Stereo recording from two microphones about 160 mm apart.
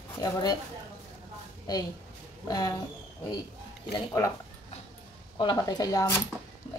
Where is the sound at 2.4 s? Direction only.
25° left (ahead or behind).